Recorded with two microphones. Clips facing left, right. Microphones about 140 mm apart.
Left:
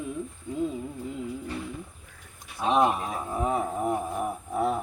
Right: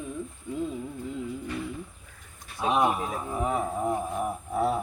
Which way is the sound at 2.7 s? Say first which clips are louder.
Left 2 dB; 5° right (ahead or behind).